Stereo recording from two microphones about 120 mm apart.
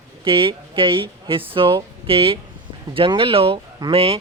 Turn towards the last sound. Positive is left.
turn(degrees=-55)  # may be behind; listen again after turning